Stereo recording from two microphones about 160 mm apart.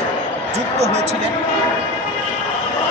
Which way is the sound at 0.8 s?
40° right (ahead or behind).